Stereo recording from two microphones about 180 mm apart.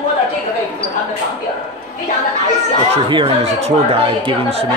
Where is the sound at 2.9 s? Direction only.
30° right (ahead or behind).